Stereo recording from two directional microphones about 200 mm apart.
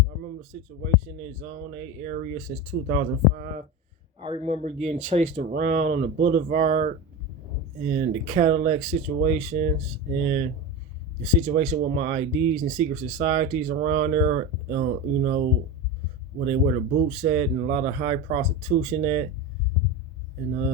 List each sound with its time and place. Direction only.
0.5 s speech: 35° right (ahead or behind)
4.2 s speech: 25° right (ahead or behind)